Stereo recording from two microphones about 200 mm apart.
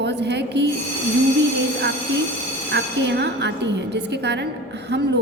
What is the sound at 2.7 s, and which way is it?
A woman's voice, 60° right (ahead or behind).